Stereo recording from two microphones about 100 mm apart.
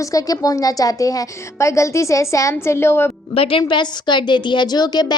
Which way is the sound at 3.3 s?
65° left (ahead or behind).